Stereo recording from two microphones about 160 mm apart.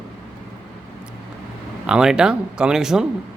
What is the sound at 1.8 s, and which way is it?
Speech, 5° right (ahead or behind).